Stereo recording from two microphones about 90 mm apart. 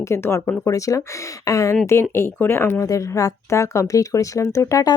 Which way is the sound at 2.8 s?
40° left (ahead or behind).